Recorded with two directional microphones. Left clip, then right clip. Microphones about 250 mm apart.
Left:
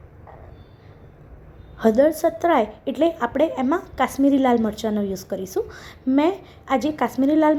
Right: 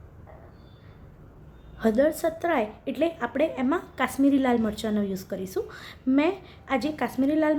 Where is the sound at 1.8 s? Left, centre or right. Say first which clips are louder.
Left 6 dB; centre.